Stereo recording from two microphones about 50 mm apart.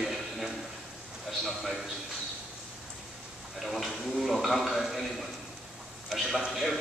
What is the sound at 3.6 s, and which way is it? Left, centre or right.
A man's voice, centre.